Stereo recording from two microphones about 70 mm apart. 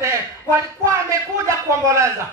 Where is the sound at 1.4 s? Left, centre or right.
Right.